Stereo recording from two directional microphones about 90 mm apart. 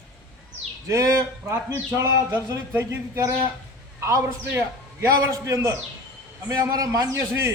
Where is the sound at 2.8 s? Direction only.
25° right (ahead or behind).